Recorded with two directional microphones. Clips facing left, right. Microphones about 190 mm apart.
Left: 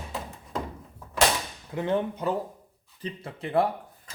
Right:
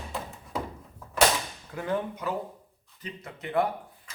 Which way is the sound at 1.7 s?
25° left (ahead or behind).